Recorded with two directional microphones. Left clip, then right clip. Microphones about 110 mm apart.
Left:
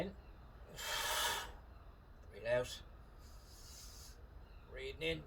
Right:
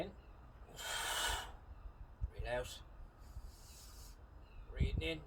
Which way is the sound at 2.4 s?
30° right (ahead or behind).